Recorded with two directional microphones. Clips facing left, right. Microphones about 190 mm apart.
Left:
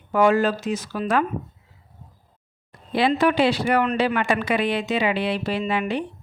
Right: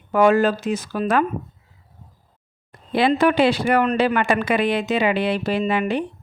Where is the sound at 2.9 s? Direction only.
50° right (ahead or behind).